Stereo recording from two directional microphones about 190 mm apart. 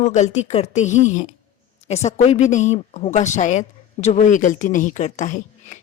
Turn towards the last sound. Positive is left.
turn(degrees=40)  # may be behind; listen again after turning